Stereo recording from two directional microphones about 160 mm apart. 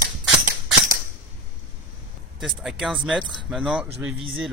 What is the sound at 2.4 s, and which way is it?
Speech, centre (ahead or behind).